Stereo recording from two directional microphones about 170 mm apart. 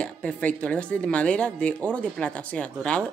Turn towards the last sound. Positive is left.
turn(degrees=5)  # may be behind; listen again after turning